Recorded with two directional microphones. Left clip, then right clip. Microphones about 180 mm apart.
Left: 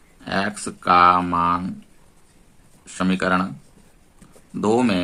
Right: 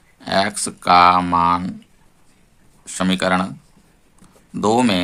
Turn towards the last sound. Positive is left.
turn(degrees=-35)  # may be behind; listen again after turning